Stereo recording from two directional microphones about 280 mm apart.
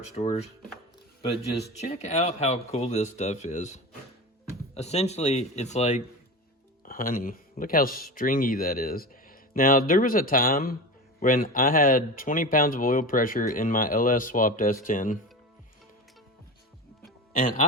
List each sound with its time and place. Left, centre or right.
0.2 s speech: left
1.9 s speech: left
17.0 s music: left